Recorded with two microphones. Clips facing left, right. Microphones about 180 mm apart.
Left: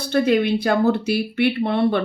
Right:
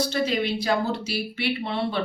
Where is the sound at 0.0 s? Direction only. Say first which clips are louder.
Left 6 dB; 55° left (ahead or behind).